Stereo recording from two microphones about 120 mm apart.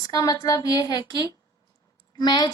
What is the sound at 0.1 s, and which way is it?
Speech, 35° left (ahead or behind).